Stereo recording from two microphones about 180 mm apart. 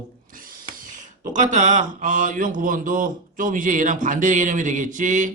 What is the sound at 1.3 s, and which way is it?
A man's voice, 45° right (ahead or behind).